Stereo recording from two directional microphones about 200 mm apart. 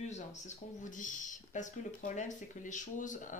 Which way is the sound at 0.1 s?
40° left (ahead or behind).